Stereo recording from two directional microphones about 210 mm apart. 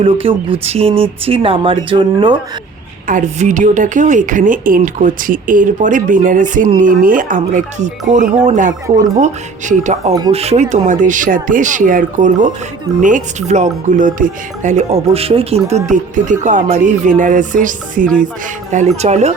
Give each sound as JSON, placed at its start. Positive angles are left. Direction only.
{"t": 0.0, "sound": "speech", "side_deg": -25}
{"t": 3.1, "sound": "speech", "side_deg": -35}
{"t": 10.1, "sound": "speech", "side_deg": -20}
{"t": 10.3, "sound": "speech", "side_deg": -30}